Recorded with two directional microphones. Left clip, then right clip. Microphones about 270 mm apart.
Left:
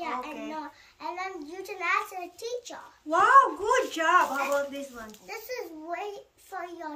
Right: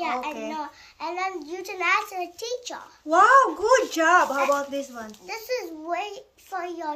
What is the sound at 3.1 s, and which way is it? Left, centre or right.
A child's voice, centre.